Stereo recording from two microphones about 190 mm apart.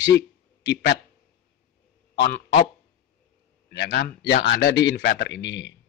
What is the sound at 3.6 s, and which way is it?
A man's voice, 55° left (ahead or behind).